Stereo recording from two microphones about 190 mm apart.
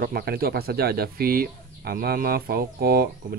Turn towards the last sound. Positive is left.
turn(degrees=-50)  # may be behind; listen again after turning